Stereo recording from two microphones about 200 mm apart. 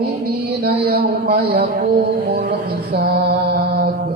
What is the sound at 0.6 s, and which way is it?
A man's voice, 50° right (ahead or behind).